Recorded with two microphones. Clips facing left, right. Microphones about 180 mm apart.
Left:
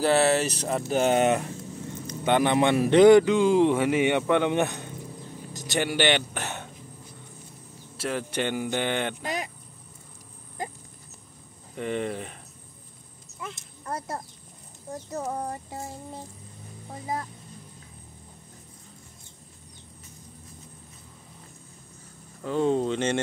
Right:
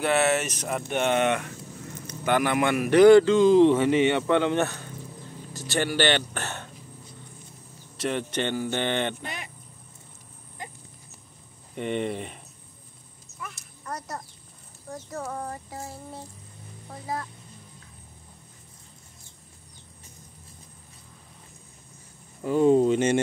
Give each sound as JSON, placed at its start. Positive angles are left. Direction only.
{"t": 0.0, "sound": "speech", "side_deg": 35}
{"t": 2.0, "sound": "a man's voice", "side_deg": 25}
{"t": 8.0, "sound": "a man's voice", "side_deg": 5}
{"t": 11.7, "sound": "speech", "side_deg": 0}
{"t": 13.4, "sound": "a sound", "side_deg": 25}
{"t": 14.9, "sound": "speech", "side_deg": 20}
{"t": 22.4, "sound": "speech", "side_deg": -10}